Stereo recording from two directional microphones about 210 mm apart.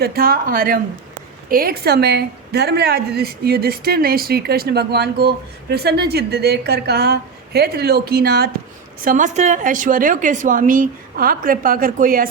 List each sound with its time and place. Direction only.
0.0 s a woman's voice: 45° right (ahead or behind)